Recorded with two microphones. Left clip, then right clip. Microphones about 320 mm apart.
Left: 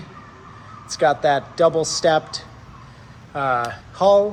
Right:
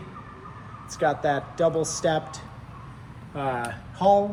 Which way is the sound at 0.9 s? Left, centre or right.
Left.